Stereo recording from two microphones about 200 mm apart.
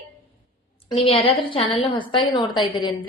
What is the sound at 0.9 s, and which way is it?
A woman's voice, 30° left (ahead or behind).